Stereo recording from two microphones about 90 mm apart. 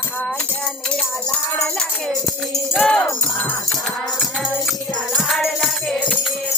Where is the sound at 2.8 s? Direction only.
10° left (ahead or behind).